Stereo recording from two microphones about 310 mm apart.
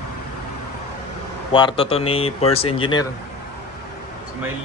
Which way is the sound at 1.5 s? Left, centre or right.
Centre.